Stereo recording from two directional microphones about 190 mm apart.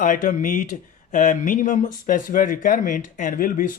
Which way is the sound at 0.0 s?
45° left (ahead or behind).